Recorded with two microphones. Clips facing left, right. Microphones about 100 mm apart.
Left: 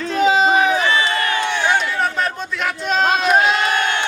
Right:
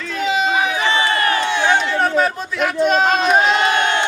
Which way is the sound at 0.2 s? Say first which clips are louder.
Left 4 dB; 35° left (ahead or behind).